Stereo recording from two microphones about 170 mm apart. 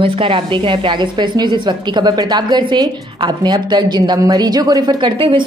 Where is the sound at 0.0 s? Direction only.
30° right (ahead or behind).